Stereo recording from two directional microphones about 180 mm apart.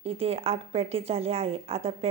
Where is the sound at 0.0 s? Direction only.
35° right (ahead or behind).